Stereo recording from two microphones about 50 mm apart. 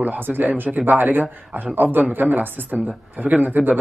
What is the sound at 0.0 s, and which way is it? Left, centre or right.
Speech, right.